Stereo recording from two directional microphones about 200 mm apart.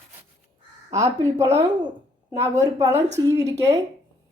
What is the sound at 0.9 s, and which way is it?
A woman's voice, 15° right (ahead or behind).